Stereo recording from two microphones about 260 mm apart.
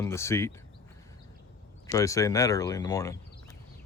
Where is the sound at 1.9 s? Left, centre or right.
Centre.